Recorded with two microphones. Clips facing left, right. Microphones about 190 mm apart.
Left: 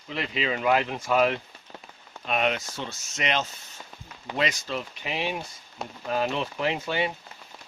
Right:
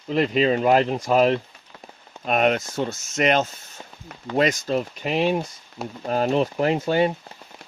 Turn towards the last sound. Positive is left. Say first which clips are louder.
# right 7 dB
turn(degrees=-40)  # may be behind; listen again after turning